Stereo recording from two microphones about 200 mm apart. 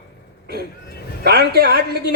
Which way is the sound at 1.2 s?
50° right (ahead or behind).